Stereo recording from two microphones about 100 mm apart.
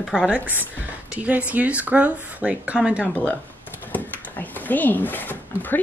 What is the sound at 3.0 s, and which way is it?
Speech, 15° left (ahead or behind).